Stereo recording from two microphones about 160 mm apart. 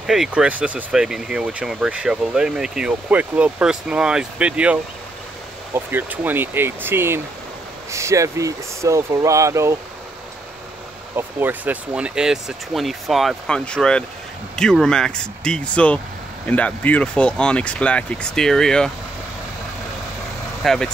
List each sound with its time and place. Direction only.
0.0 s speech: 5° right (ahead or behind); by 9.8 s 20° right (ahead or behind)
11.1 s speech: 10° right (ahead or behind); by 18.9 s 5° left (ahead or behind)
20.6 s speech: centre (ahead or behind)